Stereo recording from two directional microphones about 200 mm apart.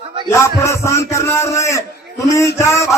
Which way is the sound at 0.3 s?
15° left (ahead or behind).